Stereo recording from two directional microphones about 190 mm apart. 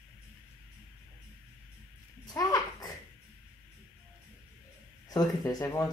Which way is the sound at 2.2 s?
20° left (ahead or behind).